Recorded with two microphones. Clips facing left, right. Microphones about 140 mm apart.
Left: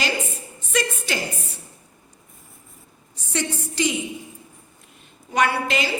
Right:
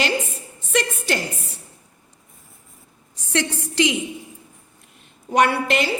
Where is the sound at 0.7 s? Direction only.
65° right (ahead or behind).